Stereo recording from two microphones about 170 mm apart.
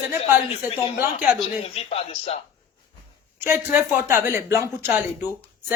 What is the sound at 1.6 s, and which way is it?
Speech, 35° left (ahead or behind).